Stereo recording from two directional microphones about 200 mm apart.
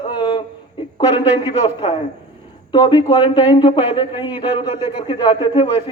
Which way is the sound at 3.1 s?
25° left (ahead or behind).